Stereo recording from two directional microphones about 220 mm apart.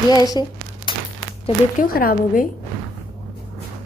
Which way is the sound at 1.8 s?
40° left (ahead or behind).